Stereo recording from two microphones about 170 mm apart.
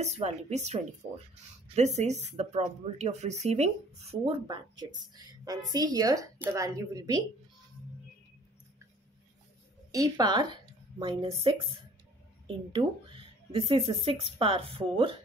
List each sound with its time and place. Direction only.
0.0 s speech: 40° right (ahead or behind); by 7.2 s 20° right (ahead or behind)
9.9 s a woman's voice: 20° right (ahead or behind)